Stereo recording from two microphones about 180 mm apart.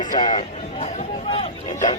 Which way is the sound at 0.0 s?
45° left (ahead or behind).